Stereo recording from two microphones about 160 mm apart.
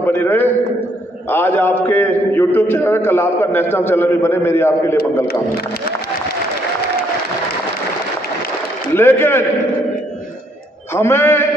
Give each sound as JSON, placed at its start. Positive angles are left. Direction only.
{"t": 0.0, "sound": "a man's voice", "side_deg": 10}
{"t": 8.9, "sound": "a man's voice", "side_deg": 15}
{"t": 11.0, "sound": "a man's voice", "side_deg": 15}